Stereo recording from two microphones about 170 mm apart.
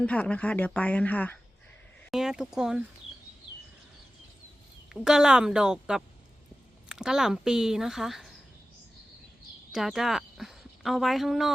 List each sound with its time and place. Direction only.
0.0 s speech: 5° left (ahead or behind)
2.0 s speech: 5° right (ahead or behind)
4.9 s speech: 5° right (ahead or behind)
9.7 s speech: centre (ahead or behind)